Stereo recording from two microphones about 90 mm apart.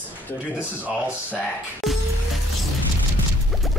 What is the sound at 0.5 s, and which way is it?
Speech, 15° right (ahead or behind).